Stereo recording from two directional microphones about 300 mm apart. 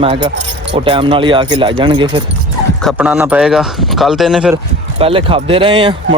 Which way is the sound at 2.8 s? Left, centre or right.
Centre.